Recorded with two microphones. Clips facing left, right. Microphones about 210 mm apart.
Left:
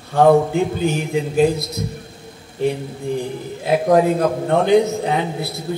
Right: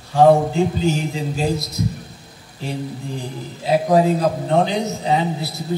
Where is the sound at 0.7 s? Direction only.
55° left (ahead or behind).